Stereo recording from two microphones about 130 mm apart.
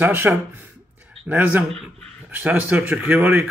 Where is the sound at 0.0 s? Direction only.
15° right (ahead or behind).